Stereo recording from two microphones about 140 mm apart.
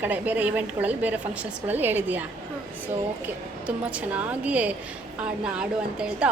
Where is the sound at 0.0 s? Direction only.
10° right (ahead or behind).